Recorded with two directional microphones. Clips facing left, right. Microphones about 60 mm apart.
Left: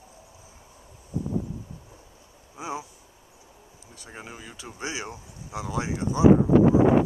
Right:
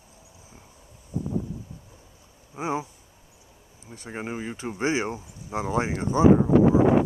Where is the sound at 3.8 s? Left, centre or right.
Right.